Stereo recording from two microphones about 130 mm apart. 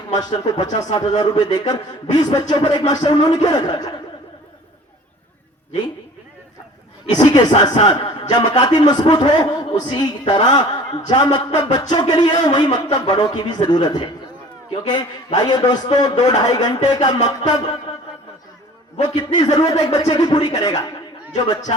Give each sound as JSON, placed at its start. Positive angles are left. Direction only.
{"t": 0.1, "sound": "a man's voice", "side_deg": 30}
{"t": 7.1, "sound": "a man's voice", "side_deg": 30}
{"t": 17.2, "sound": "music", "side_deg": 55}
{"t": 19.0, "sound": "a man's voice", "side_deg": 30}